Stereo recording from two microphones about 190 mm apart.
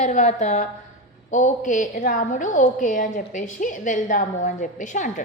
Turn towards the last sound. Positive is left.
turn(degrees=40)  # may be behind; listen again after turning